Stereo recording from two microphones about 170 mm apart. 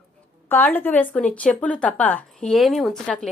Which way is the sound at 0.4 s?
10° left (ahead or behind).